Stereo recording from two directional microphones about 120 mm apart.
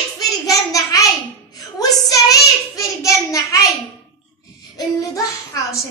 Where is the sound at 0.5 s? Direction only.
30° left (ahead or behind).